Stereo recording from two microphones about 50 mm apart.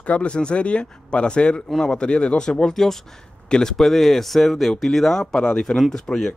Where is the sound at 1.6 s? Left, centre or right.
Centre.